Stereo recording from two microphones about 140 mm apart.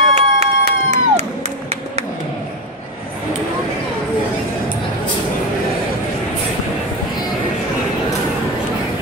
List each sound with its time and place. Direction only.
0.1 s crowd: 50° right (ahead or behind)